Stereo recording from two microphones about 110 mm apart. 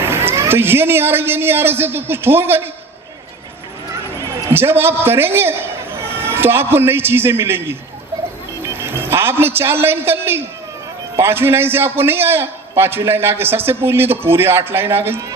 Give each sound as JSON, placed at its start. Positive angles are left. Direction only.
{"t": 0.0, "sound": "a man's voice", "side_deg": -20}
{"t": 4.2, "sound": "a man's voice", "side_deg": -25}